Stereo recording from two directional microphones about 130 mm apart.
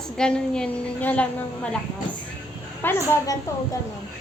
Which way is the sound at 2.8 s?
20° left (ahead or behind).